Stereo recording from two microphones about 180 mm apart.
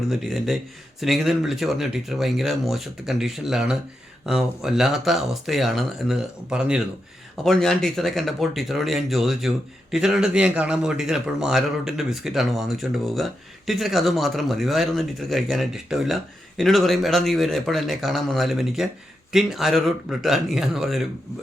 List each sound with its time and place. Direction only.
0.1 s speech: centre (ahead or behind)